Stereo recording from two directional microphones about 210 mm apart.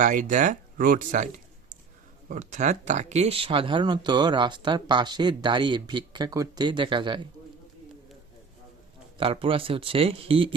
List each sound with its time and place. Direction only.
0.0 s speech: 40° right (ahead or behind); by 7.3 s 20° right (ahead or behind)
9.1 s speech: 25° right (ahead or behind)